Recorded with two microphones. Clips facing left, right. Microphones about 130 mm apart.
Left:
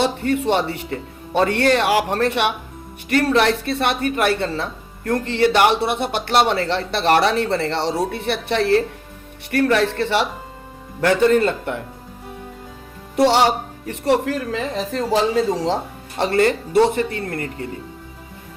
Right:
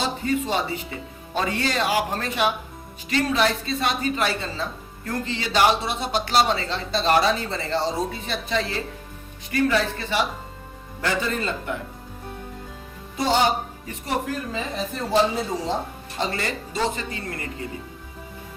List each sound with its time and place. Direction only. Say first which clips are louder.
0.0 s a woman's voice: left 5 dB; 65° left (ahead or behind)
13.1 s a woman's voice: left 6 dB; 75° left (ahead or behind); by 17.7 s 55° left (ahead or behind)